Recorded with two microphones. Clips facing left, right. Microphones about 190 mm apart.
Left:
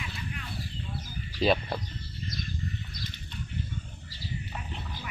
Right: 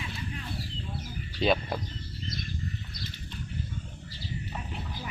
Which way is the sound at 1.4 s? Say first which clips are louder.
Left 1 dB; centre (ahead or behind).